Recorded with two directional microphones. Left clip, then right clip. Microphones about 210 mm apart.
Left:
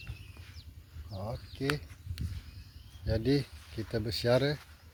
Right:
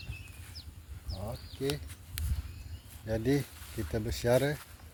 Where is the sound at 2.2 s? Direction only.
60° right (ahead or behind).